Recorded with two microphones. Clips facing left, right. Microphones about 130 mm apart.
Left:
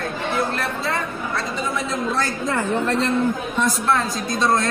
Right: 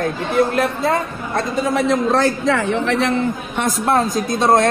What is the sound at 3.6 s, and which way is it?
Speech, 50° right (ahead or behind).